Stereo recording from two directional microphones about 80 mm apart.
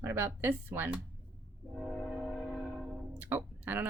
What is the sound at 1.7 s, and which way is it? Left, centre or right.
Train, centre.